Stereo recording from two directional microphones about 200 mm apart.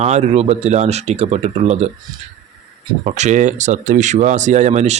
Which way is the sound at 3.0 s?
35° right (ahead or behind).